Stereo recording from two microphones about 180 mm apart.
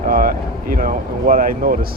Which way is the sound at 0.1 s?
50° right (ahead or behind).